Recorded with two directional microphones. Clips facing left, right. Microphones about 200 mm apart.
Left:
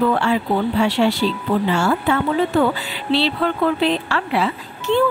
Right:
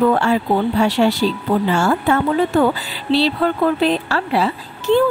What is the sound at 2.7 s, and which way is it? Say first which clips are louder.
Speech: right 2 dB; 40° right (ahead or behind).